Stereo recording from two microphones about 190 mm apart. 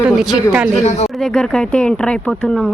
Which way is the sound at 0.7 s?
35° left (ahead or behind).